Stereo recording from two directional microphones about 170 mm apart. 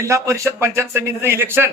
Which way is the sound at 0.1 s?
15° right (ahead or behind).